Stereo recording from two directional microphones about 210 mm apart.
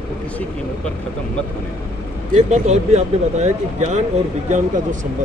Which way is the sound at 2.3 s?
30° right (ahead or behind).